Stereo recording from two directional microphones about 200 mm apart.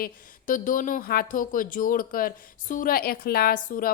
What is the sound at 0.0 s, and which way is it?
Speech, 45° left (ahead or behind).